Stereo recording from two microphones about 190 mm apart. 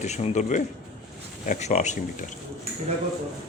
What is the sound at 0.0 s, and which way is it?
A man's voice, 35° left (ahead or behind).